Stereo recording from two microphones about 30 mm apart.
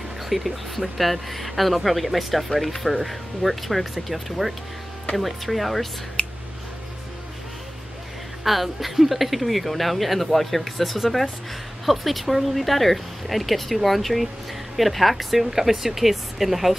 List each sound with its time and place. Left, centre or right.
0.3 s speech: centre
6.2 s a sound: left
8.5 s speech: centre